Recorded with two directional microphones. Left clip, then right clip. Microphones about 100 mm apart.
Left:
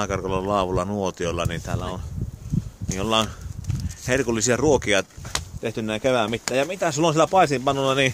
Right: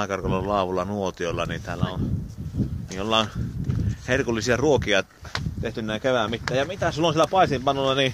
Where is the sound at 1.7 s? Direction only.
10° right (ahead or behind).